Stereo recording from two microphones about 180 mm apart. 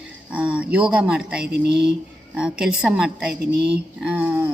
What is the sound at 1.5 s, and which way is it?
Speech, 70° right (ahead or behind).